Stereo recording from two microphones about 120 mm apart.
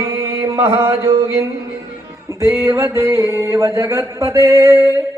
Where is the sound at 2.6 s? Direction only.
25° right (ahead or behind).